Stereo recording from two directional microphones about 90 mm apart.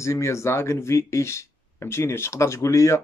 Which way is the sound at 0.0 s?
30° left (ahead or behind).